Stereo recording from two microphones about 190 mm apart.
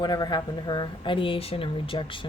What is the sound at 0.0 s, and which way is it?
Speech, 20° left (ahead or behind).